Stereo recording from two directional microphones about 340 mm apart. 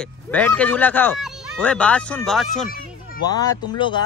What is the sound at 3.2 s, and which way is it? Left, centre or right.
Speech, centre.